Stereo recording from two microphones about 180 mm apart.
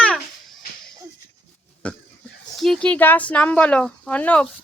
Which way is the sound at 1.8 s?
5° left (ahead or behind).